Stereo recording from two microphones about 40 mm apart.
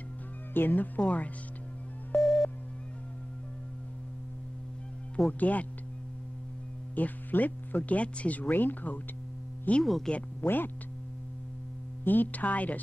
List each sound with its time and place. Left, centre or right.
0.6 s speech: left
2.1 s busy signal: centre
5.4 s speech: left
7.0 s speech: left
9.7 s speech: left
10.1 s speech: centre
10.4 s speech: left
12.0 s speech: left